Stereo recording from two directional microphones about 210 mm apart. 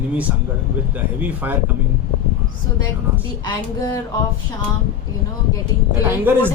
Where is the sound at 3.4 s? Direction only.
20° left (ahead or behind).